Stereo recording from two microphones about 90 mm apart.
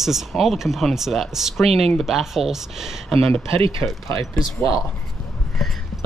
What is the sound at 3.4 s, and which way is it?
Speech, 90° right.